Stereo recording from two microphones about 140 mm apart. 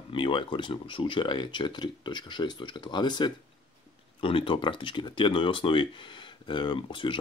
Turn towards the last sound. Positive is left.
turn(degrees=35)  # may be behind; listen again after turning